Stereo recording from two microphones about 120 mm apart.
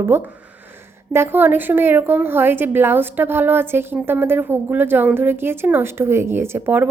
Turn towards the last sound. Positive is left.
turn(degrees=-15)  # may be behind; listen again after turning